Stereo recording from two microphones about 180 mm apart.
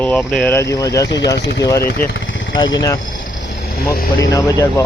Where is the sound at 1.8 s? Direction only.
55° left (ahead or behind).